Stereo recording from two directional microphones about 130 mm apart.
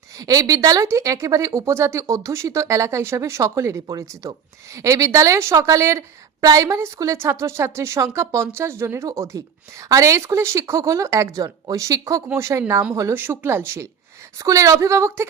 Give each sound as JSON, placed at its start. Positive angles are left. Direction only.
{"t": 0.2, "sound": "a woman's voice", "side_deg": -30}